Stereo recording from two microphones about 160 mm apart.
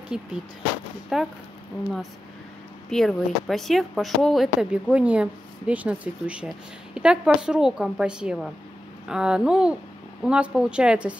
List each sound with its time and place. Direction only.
0.1 s speech: 5° right (ahead or behind)
2.9 s a woman's voice: centre (ahead or behind)